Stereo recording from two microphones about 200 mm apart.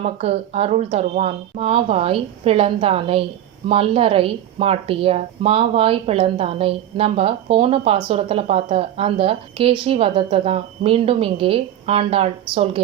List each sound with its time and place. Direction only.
0.0 s a woman's voice: 30° right (ahead or behind)